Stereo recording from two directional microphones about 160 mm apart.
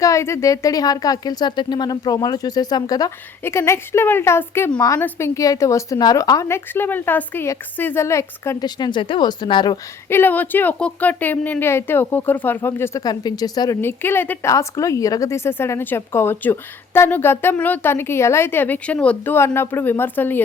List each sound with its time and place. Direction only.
0.0 s speech: 20° left (ahead or behind)
10.1 s a woman's voice: 15° left (ahead or behind)
13.8 s a woman's voice: 15° left (ahead or behind)